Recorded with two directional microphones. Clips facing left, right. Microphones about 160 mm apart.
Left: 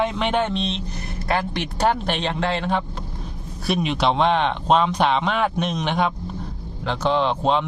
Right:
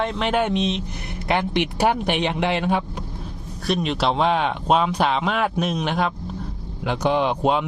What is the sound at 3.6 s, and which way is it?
Speech, 5° left (ahead or behind).